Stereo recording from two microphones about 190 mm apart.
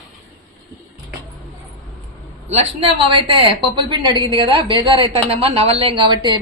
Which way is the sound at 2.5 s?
30° right (ahead or behind).